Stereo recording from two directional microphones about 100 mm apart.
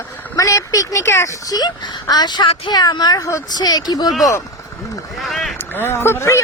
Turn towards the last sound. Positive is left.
turn(degrees=25)  # may be behind; listen again after turning